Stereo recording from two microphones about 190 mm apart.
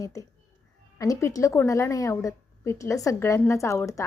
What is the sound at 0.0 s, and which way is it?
A woman's voice, 15° left (ahead or behind).